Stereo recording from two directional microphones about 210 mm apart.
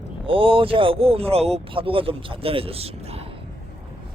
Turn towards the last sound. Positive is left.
turn(degrees=-30)  # may be behind; listen again after turning